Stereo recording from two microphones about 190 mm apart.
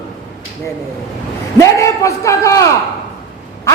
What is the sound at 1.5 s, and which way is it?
A man's voice, 15° left (ahead or behind).